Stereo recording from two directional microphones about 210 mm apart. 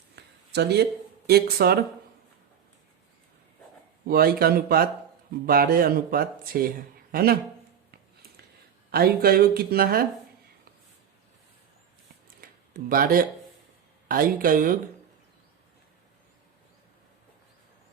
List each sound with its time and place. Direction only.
0.2 s a sound: 50° right (ahead or behind)
1.3 s speech: 45° right (ahead or behind)
4.0 s speech: 45° right (ahead or behind)
8.9 s speech: 45° right (ahead or behind)
12.4 s a sound: 45° right (ahead or behind)
14.1 s speech: 40° right (ahead or behind)